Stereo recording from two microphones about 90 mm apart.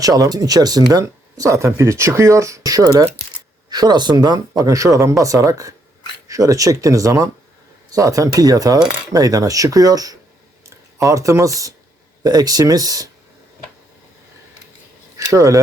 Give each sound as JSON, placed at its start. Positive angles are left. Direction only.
{"t": 0.0, "sound": "speech", "side_deg": -40}
{"t": 15.2, "sound": "speech", "side_deg": -35}